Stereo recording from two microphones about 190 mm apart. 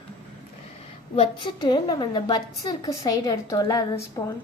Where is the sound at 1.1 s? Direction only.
25° left (ahead or behind).